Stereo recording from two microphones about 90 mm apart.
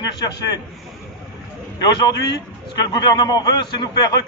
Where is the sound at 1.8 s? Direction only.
50° left (ahead or behind).